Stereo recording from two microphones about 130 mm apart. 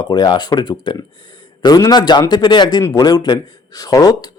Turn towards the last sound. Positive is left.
turn(degrees=30)  # may be behind; listen again after turning